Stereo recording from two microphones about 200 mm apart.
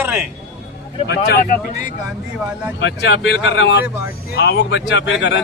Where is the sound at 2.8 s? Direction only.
65° left (ahead or behind).